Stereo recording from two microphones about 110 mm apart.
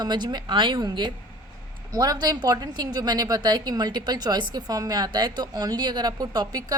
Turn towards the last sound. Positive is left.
turn(degrees=-35)  # may be behind; listen again after turning